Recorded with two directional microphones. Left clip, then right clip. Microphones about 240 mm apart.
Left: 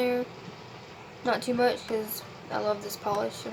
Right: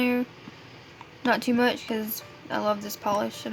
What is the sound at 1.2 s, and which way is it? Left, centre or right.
Speech, right.